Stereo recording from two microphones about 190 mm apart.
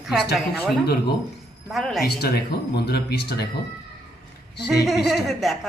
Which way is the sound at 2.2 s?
55° left (ahead or behind).